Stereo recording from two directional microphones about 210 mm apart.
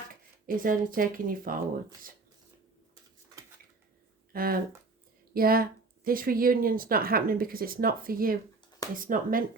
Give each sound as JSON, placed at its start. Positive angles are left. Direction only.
{"t": 0.1, "sound": "speech", "side_deg": -40}
{"t": 4.3, "sound": "speech", "side_deg": -45}